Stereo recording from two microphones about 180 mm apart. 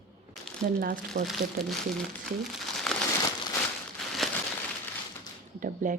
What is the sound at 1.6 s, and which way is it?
Speech, 60° right (ahead or behind).